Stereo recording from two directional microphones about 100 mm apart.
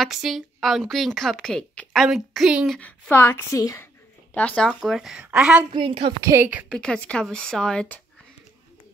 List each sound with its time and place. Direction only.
0.0 s a woman's voice: 5° right (ahead or behind)
2.8 s a woman's voice: 20° left (ahead or behind)
3.5 s a woman's voice: 35° left (ahead or behind)
3.8 s a woman's voice: 15° left (ahead or behind); by 5.7 s 10° right (ahead or behind)
5.7 s a woman's voice: 55° right (ahead or behind)
6.3 s a woman's voice: 30° right (ahead or behind)
6.7 s speech: 10° left (ahead or behind)